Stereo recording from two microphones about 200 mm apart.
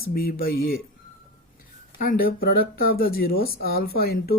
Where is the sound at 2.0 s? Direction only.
45° left (ahead or behind).